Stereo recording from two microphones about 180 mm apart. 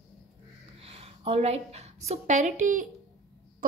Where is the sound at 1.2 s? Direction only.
35° right (ahead or behind).